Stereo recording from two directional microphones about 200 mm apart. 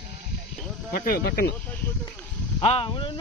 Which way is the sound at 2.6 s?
25° left (ahead or behind).